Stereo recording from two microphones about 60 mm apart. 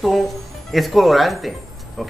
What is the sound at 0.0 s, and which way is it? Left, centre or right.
Speech, centre.